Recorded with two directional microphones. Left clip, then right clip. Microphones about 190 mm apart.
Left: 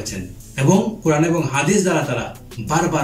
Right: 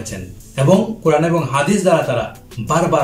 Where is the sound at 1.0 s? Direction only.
20° right (ahead or behind).